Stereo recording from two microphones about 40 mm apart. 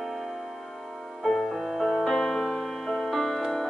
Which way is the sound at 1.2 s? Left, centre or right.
Centre.